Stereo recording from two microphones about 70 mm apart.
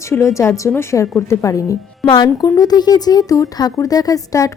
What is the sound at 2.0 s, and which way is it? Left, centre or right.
Speech, left.